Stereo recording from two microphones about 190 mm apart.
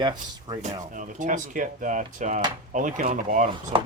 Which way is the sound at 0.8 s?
40° right (ahead or behind).